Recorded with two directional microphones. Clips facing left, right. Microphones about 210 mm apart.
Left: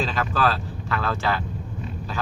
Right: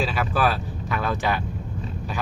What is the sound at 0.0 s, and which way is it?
Speech, 10° right (ahead or behind).